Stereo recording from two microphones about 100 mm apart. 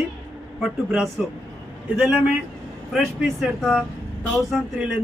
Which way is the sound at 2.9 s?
5° right (ahead or behind).